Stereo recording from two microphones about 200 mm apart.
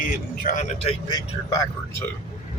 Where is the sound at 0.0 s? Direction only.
45° left (ahead or behind).